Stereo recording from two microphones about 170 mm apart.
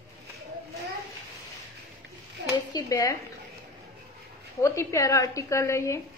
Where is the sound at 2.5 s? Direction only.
25° left (ahead or behind).